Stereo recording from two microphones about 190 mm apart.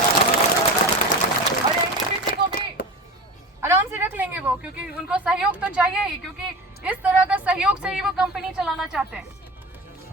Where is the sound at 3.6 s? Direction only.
15° right (ahead or behind).